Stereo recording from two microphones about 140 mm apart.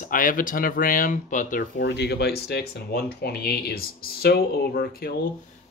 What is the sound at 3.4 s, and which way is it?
Speech, 90° left.